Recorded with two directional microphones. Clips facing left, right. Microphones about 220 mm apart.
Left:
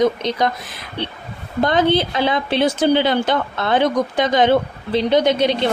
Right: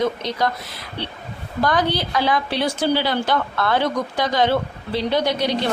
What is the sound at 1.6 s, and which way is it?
A woman's voice, 25° left (ahead or behind).